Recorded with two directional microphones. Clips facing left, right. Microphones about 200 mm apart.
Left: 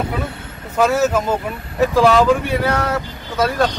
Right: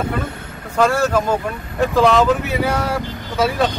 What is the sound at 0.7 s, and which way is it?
Speech, 5° left (ahead or behind).